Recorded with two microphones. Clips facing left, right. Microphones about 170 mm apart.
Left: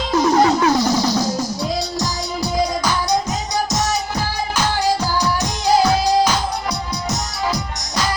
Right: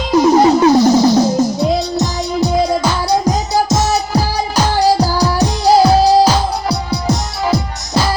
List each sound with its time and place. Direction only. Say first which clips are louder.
0.1 s music: right 6 dB; 20° right (ahead or behind)
0.9 s music: right 8 dB; 40° right (ahead or behind)
1.4 s music: right 8 dB; 20° right (ahead or behind)